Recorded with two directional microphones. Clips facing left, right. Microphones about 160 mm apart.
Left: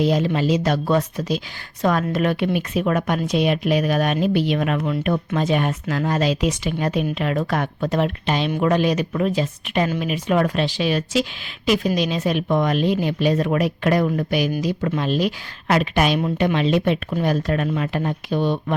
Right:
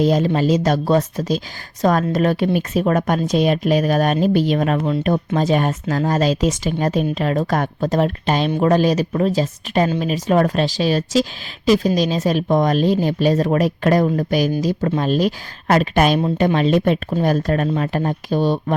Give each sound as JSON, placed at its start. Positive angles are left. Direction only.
{"t": 0.0, "sound": "speech", "side_deg": -40}